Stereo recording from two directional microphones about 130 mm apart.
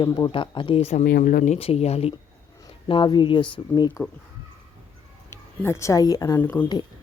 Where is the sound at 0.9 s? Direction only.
75° left (ahead or behind).